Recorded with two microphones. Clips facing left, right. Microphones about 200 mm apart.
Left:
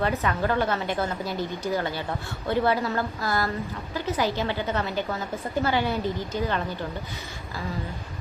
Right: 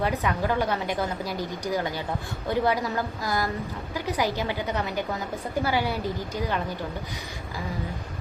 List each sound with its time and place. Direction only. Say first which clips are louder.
0.0 s a woman's voice: left 1 dB; 10° right (ahead or behind)